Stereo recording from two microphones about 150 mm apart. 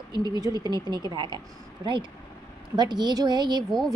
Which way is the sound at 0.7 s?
30° right (ahead or behind).